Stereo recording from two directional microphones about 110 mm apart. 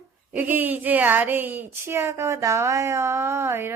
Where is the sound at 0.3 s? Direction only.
15° right (ahead or behind).